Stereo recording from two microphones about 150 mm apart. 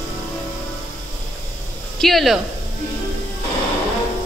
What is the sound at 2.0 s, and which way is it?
Chuckle, centre (ahead or behind).